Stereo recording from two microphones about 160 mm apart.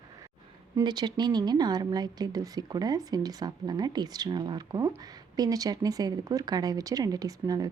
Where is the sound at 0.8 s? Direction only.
25° right (ahead or behind).